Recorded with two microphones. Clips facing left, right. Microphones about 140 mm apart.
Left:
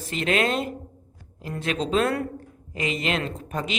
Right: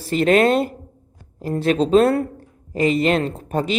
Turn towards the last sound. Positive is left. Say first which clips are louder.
# right 7 dB
turn(degrees=-35)  # may be behind; listen again after turning